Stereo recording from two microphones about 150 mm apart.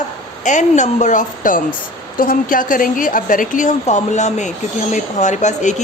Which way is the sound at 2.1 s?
70° left (ahead or behind).